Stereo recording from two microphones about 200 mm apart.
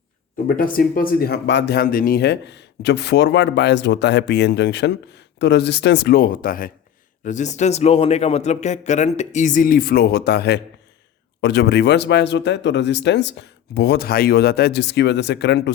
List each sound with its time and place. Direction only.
0.4 s speech: 45° left (ahead or behind)